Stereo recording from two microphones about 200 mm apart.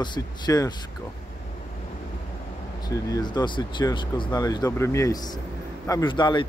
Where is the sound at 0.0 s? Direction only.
20° left (ahead or behind).